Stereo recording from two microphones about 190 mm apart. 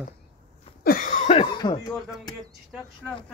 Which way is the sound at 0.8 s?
45° left (ahead or behind).